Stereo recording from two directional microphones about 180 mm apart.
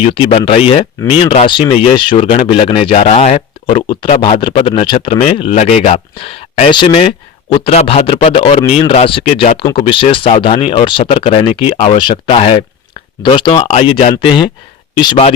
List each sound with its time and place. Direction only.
0.0 s speech: 30° left (ahead or behind)